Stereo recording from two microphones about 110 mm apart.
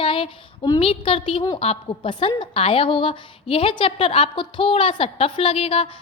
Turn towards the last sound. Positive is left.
turn(degrees=55)  # may be behind; listen again after turning